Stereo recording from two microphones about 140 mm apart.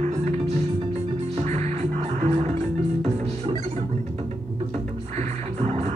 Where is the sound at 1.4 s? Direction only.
50° right (ahead or behind).